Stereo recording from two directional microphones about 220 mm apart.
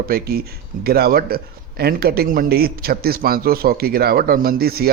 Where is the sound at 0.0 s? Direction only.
45° right (ahead or behind).